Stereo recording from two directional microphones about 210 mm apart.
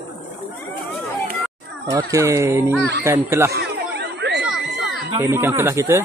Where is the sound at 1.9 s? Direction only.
15° right (ahead or behind).